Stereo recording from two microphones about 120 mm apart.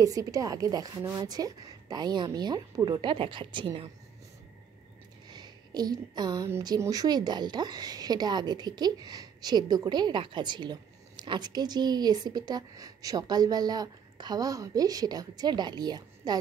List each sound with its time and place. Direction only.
0.0 s a woman's voice: 30° right (ahead or behind); by 3.9 s 45° right (ahead or behind)
5.3 s a woman's voice: 35° right (ahead or behind)